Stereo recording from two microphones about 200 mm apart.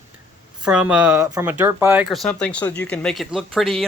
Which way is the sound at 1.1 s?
15° right (ahead or behind).